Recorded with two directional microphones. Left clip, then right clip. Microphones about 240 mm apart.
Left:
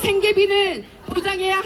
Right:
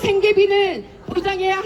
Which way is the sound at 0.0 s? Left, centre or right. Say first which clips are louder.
Right 2 dB; centre.